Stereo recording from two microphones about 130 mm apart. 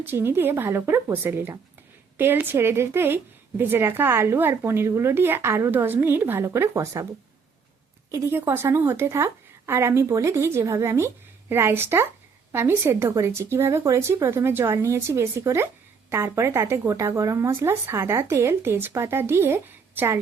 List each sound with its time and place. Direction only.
0.0 s a woman's voice: 15° right (ahead or behind)
8.1 s speech: 20° right (ahead or behind)